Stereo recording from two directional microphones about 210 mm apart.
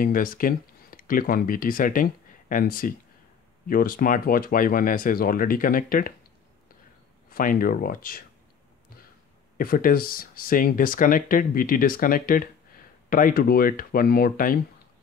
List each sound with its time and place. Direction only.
0.0 s speech: 40° left (ahead or behind)
7.2 s speech: 40° left (ahead or behind)
9.6 s speech: 45° left (ahead or behind)